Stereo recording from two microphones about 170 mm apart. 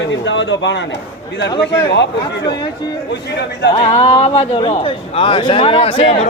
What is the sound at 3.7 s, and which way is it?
A man's voice, 30° left (ahead or behind).